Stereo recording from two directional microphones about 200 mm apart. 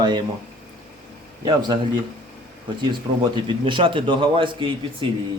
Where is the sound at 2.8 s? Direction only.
25° right (ahead or behind).